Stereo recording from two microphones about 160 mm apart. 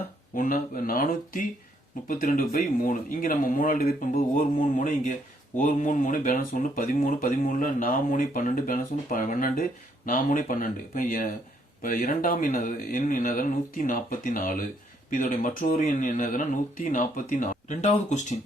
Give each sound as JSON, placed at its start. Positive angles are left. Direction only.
{"t": 0.3, "sound": "speech", "side_deg": 60}